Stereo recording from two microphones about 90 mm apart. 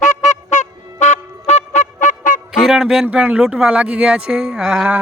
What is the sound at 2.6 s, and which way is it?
Speech, 5° right (ahead or behind).